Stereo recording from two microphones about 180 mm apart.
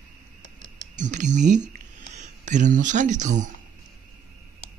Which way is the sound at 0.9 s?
40° right (ahead or behind).